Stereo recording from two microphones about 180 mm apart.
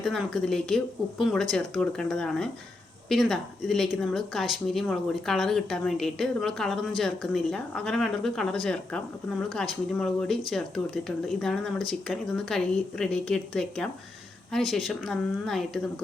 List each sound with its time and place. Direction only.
0.0 s speech: centre (ahead or behind)